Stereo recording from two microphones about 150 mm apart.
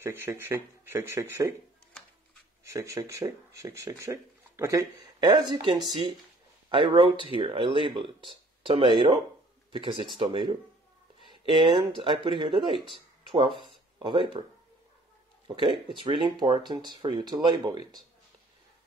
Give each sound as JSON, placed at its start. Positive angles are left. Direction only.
{"t": 0.0, "sound": "speech", "side_deg": -15}
{"t": 2.6, "sound": "speech", "side_deg": -20}
{"t": 15.4, "sound": "speech", "side_deg": -35}